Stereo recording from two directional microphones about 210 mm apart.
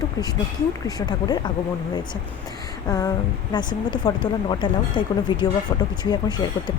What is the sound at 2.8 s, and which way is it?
Speech, 15° left (ahead or behind).